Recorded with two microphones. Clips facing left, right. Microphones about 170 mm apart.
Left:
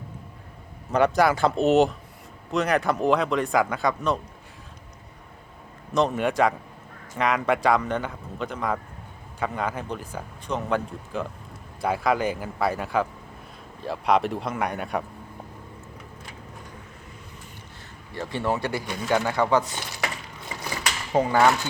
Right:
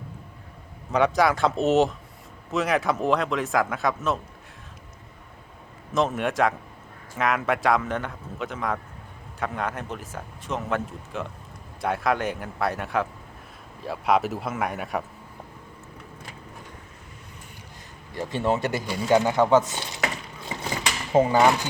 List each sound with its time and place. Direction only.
0.9 s speech: centre (ahead or behind)
5.9 s speech: centre (ahead or behind)
18.4 s speech: 20° right (ahead or behind)
20.7 s a sound: 20° right (ahead or behind)